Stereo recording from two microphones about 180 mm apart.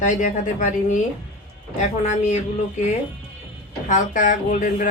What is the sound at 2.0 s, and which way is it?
A woman's voice, 40° left (ahead or behind).